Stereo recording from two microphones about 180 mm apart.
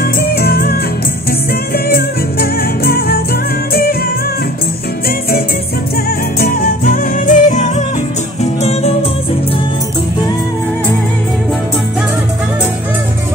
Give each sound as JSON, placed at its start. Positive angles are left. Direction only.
{"t": 0.0, "sound": "music", "side_deg": 60}
{"t": 6.4, "sound": "music", "side_deg": 50}